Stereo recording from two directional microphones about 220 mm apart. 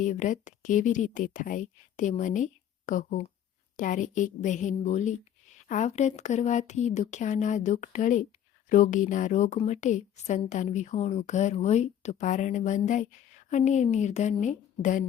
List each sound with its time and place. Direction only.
0.0 s a woman's voice: 35° left (ahead or behind)